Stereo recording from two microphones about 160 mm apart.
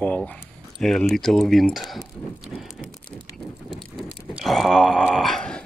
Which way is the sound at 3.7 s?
Centre (ahead or behind).